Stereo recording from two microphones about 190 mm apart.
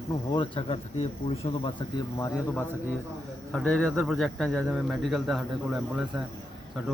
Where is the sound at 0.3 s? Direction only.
30° left (ahead or behind).